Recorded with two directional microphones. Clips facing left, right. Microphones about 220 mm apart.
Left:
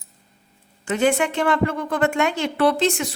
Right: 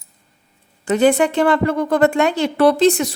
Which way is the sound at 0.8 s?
35° right (ahead or behind).